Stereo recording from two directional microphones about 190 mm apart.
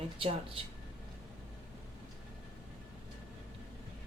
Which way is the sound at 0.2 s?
30° right (ahead or behind).